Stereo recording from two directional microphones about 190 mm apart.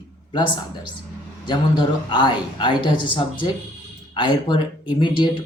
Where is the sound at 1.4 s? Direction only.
25° left (ahead or behind).